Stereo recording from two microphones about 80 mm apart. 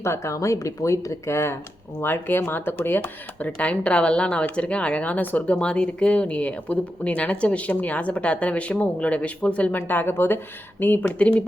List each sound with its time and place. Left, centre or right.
0.0 s speech: left; by 11.4 s centre